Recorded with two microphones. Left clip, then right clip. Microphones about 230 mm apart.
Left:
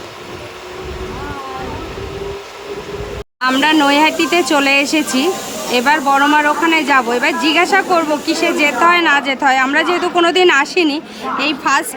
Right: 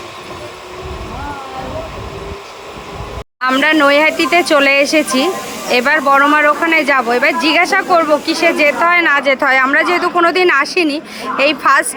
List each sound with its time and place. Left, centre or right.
3.4 s speech: centre